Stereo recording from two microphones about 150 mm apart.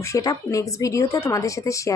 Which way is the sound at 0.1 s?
25° left (ahead or behind).